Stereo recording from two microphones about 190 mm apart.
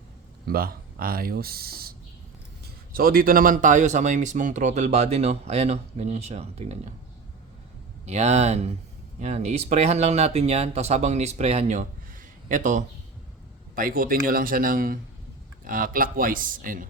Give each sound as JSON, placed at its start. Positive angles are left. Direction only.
{"t": 0.4, "sound": "speech", "side_deg": -50}
{"t": 8.0, "sound": "speech", "side_deg": -35}